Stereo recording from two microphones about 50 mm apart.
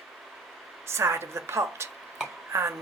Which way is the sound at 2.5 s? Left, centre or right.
Right.